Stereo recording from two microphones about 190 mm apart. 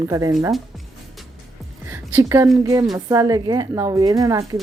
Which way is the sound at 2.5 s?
15° right (ahead or behind).